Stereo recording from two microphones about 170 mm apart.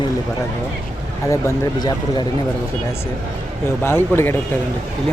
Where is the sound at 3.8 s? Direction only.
15° left (ahead or behind).